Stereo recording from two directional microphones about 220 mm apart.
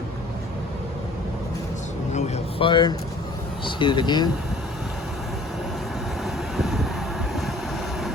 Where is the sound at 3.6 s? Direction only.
20° left (ahead or behind).